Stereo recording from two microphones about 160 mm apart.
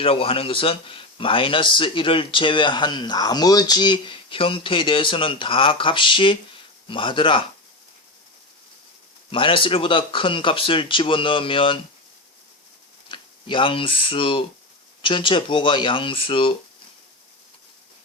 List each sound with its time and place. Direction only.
0.0 s a man's voice: 35° left (ahead or behind)
9.3 s a man's voice: 35° left (ahead or behind)
13.1 s a man's voice: 30° left (ahead or behind)